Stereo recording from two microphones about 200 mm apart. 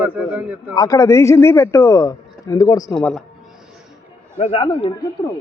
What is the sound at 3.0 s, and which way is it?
Speech, 5° left (ahead or behind).